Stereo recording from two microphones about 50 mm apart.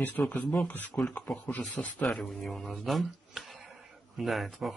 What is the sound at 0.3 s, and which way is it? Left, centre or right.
Speech, left.